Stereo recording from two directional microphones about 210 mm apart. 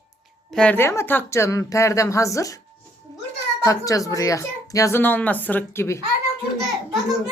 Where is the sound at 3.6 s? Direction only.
15° left (ahead or behind).